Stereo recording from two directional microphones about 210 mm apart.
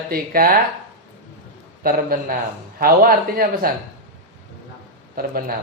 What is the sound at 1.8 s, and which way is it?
Speech, 45° right (ahead or behind).